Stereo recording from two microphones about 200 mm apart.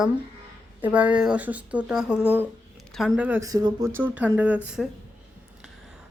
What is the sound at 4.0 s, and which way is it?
Speech, 5° right (ahead or behind).